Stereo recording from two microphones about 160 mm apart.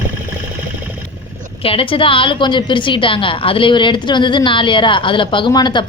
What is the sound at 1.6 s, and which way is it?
A woman's voice, 35° left (ahead or behind).